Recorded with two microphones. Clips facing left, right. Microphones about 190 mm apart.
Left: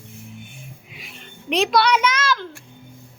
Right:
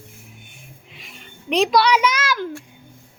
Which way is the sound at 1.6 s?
Centre (ahead or behind).